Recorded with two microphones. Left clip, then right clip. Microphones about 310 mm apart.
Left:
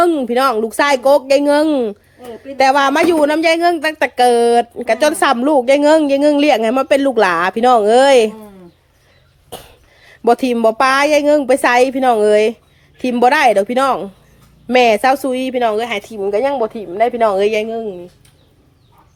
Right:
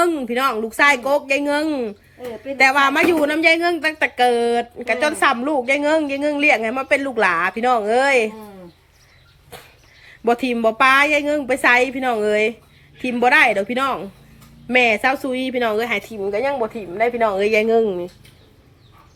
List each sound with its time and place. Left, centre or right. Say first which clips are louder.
0.0 s a woman's voice: left 5 dB; centre
10.1 s a woman's voice: left 6 dB; centre